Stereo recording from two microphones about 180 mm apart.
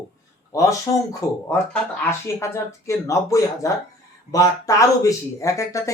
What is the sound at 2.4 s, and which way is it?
Speech, 15° left (ahead or behind).